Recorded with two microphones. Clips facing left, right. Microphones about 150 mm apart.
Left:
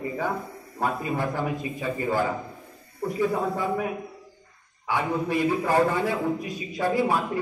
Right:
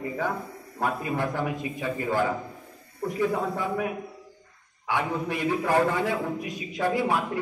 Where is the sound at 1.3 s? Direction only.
10° left (ahead or behind).